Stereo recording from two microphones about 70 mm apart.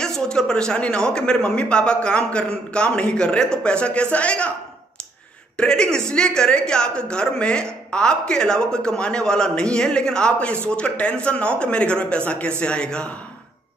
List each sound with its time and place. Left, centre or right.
0.0 s a woman's voice: centre
5.6 s a woman's voice: centre